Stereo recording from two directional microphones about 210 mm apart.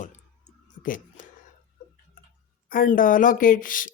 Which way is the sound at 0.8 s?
40° left (ahead or behind).